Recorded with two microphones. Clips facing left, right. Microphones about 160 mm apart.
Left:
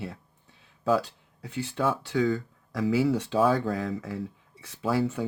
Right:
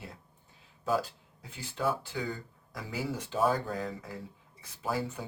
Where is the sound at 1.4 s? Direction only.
80° left.